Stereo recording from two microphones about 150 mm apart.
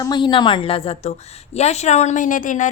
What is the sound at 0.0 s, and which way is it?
A woman's voice, 30° left (ahead or behind).